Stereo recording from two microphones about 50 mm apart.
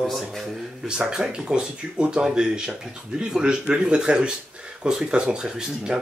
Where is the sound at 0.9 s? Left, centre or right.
Centre.